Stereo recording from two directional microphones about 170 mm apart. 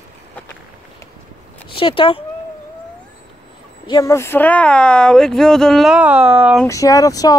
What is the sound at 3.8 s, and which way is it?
Speech, 20° left (ahead or behind).